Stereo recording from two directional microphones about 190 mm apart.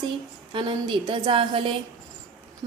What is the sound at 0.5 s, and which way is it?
A woman's voice, 25° right (ahead or behind).